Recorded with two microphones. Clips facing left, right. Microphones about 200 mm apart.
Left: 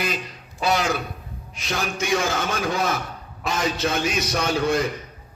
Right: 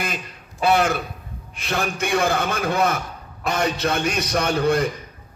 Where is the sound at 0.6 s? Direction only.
55° right (ahead or behind).